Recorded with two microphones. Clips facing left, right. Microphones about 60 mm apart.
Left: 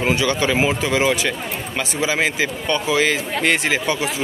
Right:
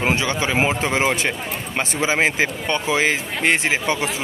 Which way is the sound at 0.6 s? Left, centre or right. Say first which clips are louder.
Left 1 dB; right.